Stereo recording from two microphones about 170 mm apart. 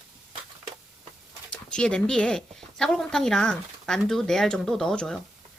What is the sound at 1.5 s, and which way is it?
Speech, 5° left (ahead or behind).